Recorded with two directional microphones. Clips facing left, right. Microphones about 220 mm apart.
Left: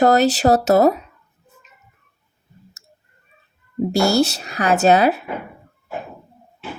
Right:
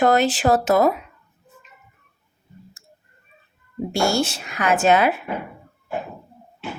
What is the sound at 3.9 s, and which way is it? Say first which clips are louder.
Speech: left 4 dB; 35° left (ahead or behind).